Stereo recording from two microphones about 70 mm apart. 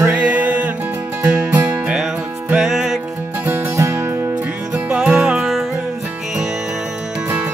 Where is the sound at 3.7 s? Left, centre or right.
Right.